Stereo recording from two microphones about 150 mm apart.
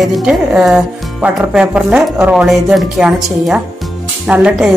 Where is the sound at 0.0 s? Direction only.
Centre (ahead or behind).